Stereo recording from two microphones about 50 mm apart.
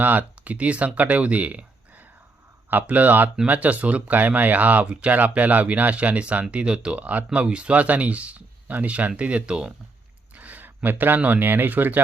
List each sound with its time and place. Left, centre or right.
0.0 s speech: right
5.1 s speech: right
10.3 s a sound: right
10.8 s speech: right